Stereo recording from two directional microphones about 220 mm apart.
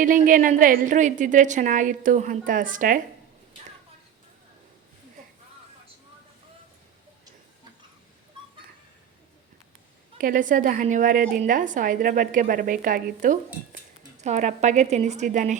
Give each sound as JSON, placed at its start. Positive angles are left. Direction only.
{"t": 0.0, "sound": "a woman's voice", "side_deg": -35}
{"t": 10.2, "sound": "a woman's voice", "side_deg": -40}